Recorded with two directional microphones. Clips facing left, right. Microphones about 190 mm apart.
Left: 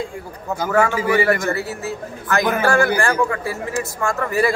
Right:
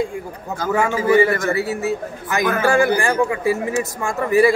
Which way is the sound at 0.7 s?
15° right (ahead or behind).